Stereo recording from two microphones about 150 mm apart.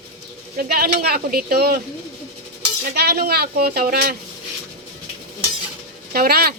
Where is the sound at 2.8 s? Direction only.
90° right.